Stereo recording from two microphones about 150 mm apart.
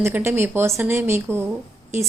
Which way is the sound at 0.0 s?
15° right (ahead or behind).